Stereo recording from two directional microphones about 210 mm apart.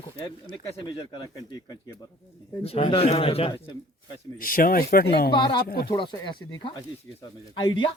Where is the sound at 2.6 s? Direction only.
25° left (ahead or behind).